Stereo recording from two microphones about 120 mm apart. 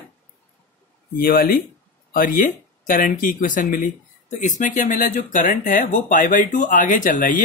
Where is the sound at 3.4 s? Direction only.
90° left.